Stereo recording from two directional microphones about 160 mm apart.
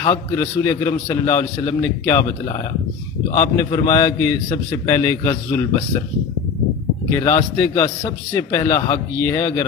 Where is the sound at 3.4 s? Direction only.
20° left (ahead or behind).